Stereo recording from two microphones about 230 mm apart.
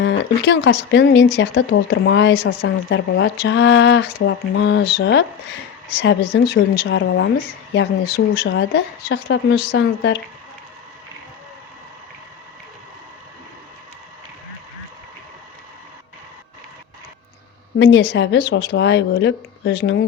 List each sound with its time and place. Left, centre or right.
0.0 s speech: left
17.7 s speech: left